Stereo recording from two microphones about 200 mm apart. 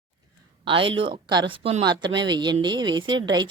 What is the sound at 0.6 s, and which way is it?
Speech, 25° right (ahead or behind).